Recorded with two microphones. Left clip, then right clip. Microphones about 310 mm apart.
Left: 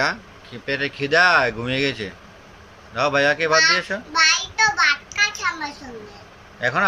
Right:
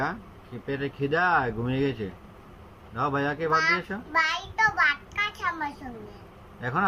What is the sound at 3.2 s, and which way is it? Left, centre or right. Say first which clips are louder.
Speech: left 9 dB; left.